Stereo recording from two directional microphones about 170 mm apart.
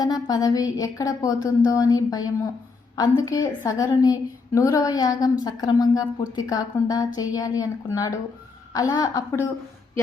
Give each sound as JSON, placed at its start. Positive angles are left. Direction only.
{"t": 0.0, "sound": "a woman's voice", "side_deg": 20}